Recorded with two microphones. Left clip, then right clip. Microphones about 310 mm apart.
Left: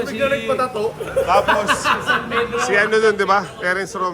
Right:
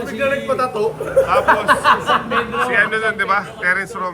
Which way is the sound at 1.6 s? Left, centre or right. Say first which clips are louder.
Right 4 dB; centre.